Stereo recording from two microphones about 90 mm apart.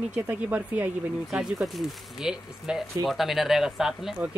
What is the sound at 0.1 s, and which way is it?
Speech, 15° right (ahead or behind).